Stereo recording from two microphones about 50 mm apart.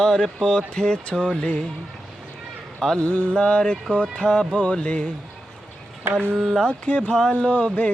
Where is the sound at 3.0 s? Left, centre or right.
Left.